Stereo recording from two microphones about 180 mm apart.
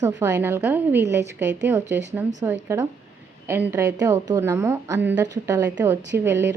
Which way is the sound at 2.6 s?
15° right (ahead or behind).